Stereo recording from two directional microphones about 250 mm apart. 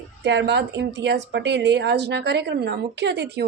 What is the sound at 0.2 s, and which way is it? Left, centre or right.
Speech, right.